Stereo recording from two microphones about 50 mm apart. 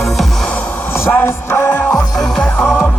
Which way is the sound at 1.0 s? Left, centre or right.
Left.